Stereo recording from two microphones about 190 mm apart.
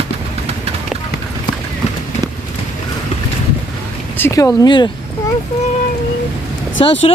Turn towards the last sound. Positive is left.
turn(degrees=25)  # may be behind; listen again after turning